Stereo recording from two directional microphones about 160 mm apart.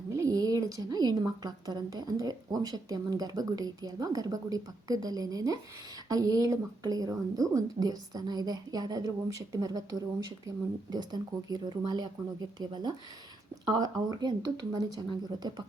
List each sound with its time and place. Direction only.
0.1 s speech: 20° right (ahead or behind)